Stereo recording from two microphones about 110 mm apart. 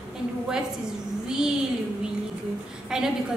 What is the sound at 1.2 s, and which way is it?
Speech, 5° right (ahead or behind).